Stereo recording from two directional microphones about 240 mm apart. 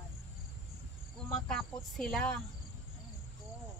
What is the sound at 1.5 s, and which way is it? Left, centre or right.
Speech, centre.